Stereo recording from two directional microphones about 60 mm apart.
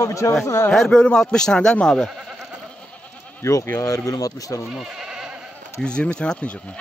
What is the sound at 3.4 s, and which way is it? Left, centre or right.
Speech, left.